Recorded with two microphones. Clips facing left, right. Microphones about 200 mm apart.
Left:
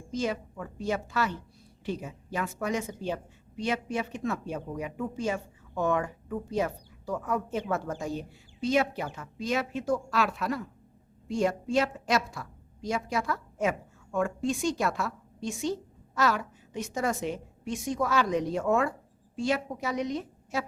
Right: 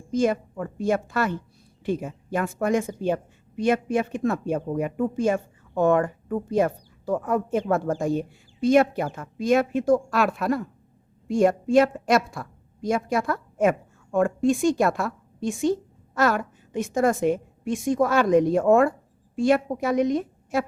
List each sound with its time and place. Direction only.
0.1 s a woman's voice: 50° right (ahead or behind)